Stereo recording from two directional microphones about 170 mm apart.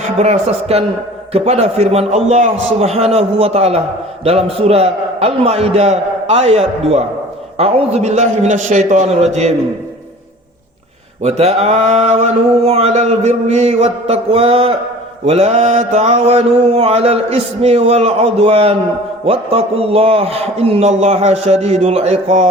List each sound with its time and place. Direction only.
0.2 s mantra: 40° right (ahead or behind)
11.2 s mantra: 40° right (ahead or behind)